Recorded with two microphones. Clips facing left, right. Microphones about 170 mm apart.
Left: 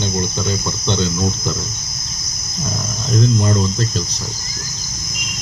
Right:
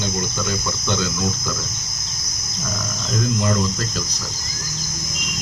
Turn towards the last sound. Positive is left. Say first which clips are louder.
# left 3 dB
turn(degrees=25)  # may be behind; listen again after turning